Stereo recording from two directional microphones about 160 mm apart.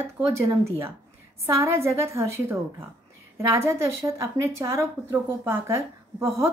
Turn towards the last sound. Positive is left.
turn(degrees=-15)  # may be behind; listen again after turning